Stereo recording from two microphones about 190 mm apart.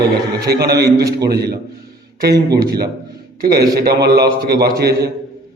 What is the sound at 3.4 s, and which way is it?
A man's voice, 55° right (ahead or behind).